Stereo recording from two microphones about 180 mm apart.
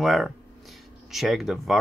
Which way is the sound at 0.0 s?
Centre (ahead or behind).